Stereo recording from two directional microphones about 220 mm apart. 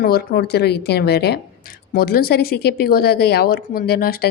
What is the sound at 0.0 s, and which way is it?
A woman's voice, 45° left (ahead or behind).